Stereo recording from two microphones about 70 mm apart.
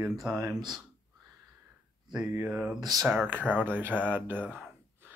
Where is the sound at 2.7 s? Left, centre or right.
Right.